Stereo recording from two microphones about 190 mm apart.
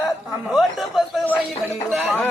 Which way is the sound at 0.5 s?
5° left (ahead or behind).